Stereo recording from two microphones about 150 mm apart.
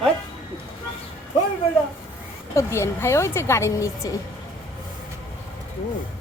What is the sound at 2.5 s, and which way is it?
A woman's voice, 20° left (ahead or behind).